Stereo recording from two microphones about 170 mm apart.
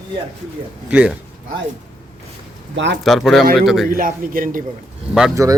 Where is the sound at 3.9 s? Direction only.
55° right (ahead or behind).